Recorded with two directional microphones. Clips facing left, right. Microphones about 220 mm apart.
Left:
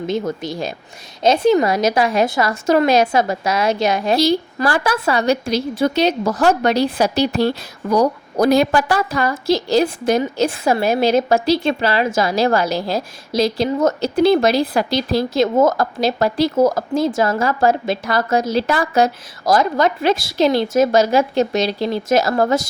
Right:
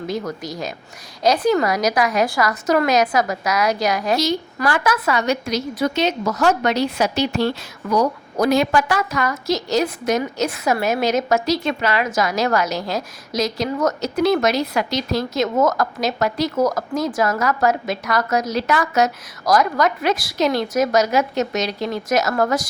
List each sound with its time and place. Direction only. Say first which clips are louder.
0.1 s a woman's voice: left 5 dB; 25° left (ahead or behind)